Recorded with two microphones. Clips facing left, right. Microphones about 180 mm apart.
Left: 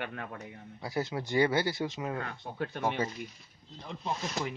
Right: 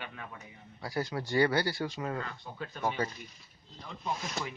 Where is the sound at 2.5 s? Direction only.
55° left (ahead or behind).